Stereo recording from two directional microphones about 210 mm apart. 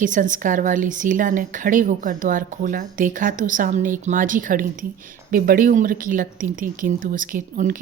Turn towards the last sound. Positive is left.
turn(degrees=-40)  # may be behind; listen again after turning